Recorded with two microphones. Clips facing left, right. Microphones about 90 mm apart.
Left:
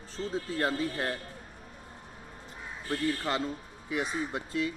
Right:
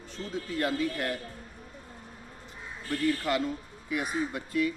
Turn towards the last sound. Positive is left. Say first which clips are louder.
# right 3 dB
turn(degrees=25)  # may be behind; listen again after turning